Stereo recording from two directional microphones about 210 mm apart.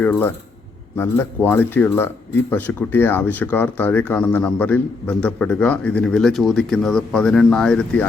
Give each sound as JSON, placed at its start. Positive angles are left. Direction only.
{"t": 0.0, "sound": "speech", "side_deg": 10}